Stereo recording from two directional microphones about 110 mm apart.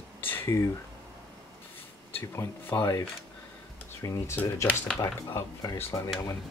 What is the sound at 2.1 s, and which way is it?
Speech, 20° left (ahead or behind).